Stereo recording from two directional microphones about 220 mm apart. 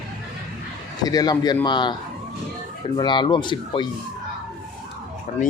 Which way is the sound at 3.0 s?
20° left (ahead or behind).